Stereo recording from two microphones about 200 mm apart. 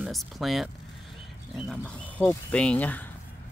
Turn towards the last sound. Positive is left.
turn(degrees=10)  # may be behind; listen again after turning